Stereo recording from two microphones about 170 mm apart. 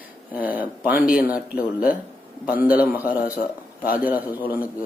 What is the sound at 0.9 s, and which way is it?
Speech, 55° left (ahead or behind).